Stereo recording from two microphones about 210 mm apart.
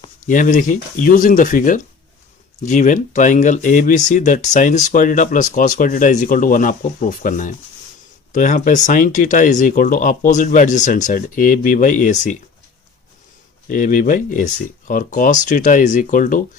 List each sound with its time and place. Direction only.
0.3 s speech: 40° left (ahead or behind)
13.7 s speech: 40° left (ahead or behind)